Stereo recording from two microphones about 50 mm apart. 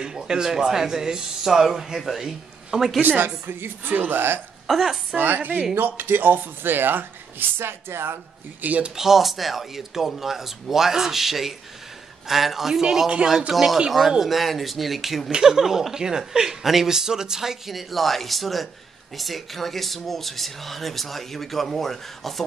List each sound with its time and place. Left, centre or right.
0.0 s speech: centre
3.0 s a woman's voice: right
4.6 s a woman's voice: centre
5.1 s a woman's voice: right
8.6 s speech: right
8.9 s speech: centre